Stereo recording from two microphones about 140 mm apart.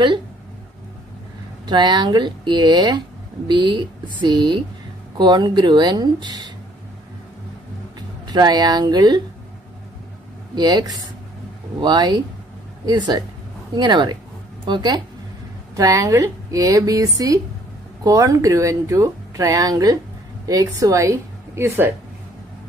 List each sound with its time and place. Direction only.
1.7 s speech: 30° right (ahead or behind)
8.3 s speech: 30° right (ahead or behind)
10.5 s a woman's voice: 30° right (ahead or behind)